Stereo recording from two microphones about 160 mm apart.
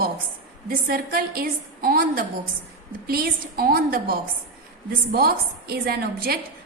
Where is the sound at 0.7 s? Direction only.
65° right (ahead or behind).